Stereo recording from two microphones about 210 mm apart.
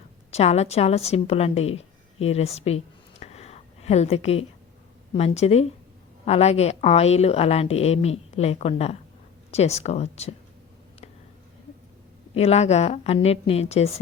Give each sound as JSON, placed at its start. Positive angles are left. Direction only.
{"t": 0.3, "sound": "a woman's voice", "side_deg": 30}
{"t": 12.4, "sound": "a woman's voice", "side_deg": 30}